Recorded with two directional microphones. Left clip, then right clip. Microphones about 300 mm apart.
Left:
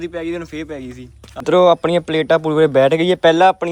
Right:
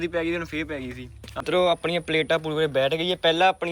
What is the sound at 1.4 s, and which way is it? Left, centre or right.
Speech, left.